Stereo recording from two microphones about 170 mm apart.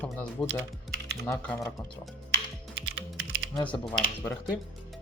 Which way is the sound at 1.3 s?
15° left (ahead or behind).